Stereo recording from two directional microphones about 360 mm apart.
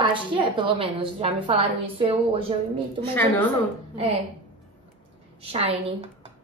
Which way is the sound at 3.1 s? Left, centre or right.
Centre.